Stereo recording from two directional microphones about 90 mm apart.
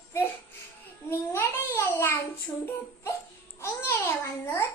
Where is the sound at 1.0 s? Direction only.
30° left (ahead or behind).